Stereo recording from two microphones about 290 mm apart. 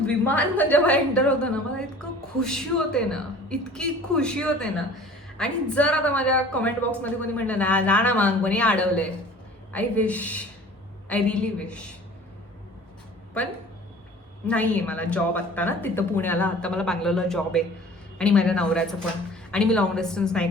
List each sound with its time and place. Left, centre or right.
0.0 s a woman's voice: centre
14.4 s a woman's voice: centre